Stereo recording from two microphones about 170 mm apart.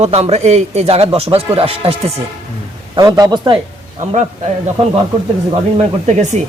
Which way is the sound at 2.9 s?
20° right (ahead or behind).